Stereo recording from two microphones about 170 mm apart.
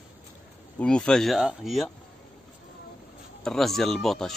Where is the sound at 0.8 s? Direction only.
5° left (ahead or behind).